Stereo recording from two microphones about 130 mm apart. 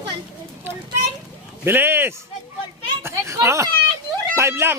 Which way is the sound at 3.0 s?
20° right (ahead or behind).